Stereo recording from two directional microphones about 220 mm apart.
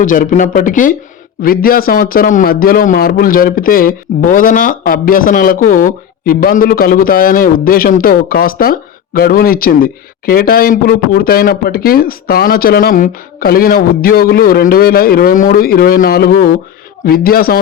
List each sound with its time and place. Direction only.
0.0 s a man's voice: 35° left (ahead or behind)